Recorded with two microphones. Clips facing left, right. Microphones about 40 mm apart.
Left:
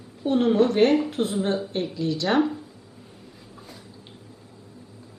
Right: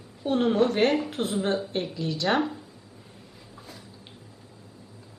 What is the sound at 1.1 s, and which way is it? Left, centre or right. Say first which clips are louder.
Speech: left 3 dB; right.